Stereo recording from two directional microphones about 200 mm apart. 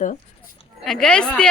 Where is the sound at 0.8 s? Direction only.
5° left (ahead or behind).